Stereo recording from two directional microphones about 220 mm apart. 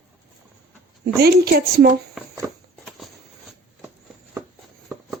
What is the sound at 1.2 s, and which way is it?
Speech, 45° right (ahead or behind).